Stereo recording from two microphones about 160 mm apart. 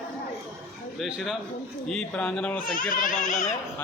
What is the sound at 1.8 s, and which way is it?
Speech, 5° left (ahead or behind).